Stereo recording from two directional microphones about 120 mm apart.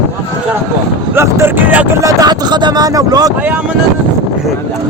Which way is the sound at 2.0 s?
30° right (ahead or behind).